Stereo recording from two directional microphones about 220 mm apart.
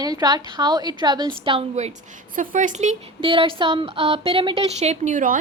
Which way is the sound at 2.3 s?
35° right (ahead or behind).